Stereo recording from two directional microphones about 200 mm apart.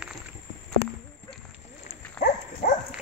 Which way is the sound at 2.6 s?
45° left (ahead or behind).